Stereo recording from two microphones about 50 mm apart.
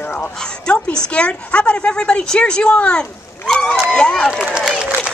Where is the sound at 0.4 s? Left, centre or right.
Centre.